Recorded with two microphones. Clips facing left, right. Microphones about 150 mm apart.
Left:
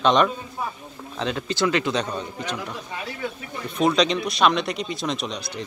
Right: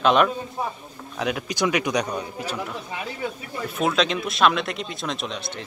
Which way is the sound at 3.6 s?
5° right (ahead or behind).